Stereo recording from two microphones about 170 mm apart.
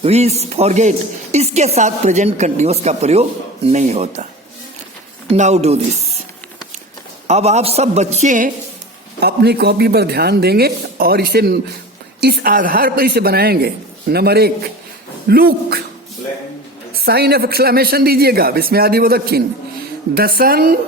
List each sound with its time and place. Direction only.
0.0 s a woman's voice: 40° right (ahead or behind)
5.3 s speech: 40° right (ahead or behind)
7.3 s a woman's voice: 40° right (ahead or behind)
9.2 s a woman's voice: 75° right (ahead or behind)
17.1 s speech: 70° right (ahead or behind)